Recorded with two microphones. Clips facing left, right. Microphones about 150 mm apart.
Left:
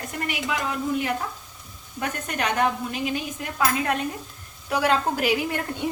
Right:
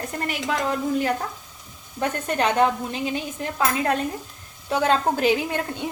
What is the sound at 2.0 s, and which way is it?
A woman's voice, 30° right (ahead or behind).